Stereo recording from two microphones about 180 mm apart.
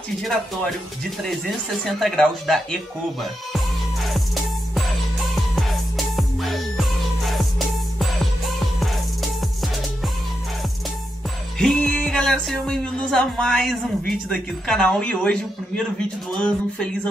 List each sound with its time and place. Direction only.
2.0 s speech: centre (ahead or behind)
5.6 s music: centre (ahead or behind)
11.5 s music: centre (ahead or behind)